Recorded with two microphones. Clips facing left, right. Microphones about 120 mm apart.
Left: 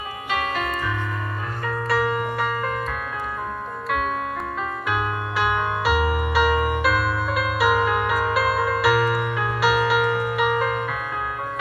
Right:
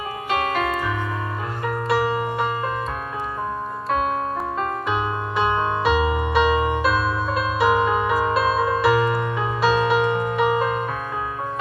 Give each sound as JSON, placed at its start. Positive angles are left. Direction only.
{"t": 1.6, "sound": "music", "side_deg": -15}
{"t": 5.9, "sound": "music", "side_deg": -25}